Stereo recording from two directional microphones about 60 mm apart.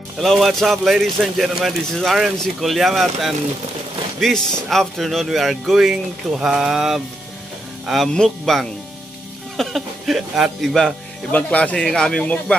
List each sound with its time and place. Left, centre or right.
0.2 s a man's voice: centre
8.1 s a man's voice: centre
11.3 s speech: left
11.7 s speech: centre